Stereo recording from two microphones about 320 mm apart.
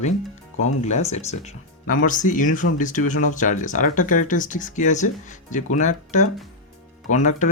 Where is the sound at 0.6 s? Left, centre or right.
Left.